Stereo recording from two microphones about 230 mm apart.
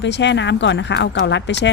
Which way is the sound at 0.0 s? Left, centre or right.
Left.